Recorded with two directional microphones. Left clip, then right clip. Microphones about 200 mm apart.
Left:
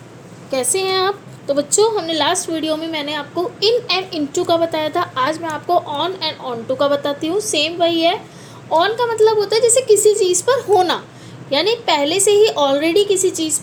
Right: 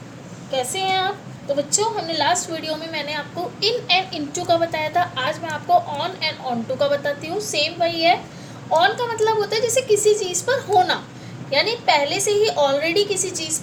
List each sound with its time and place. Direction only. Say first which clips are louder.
0.5 s a woman's voice: left 3 dB; 50° left (ahead or behind)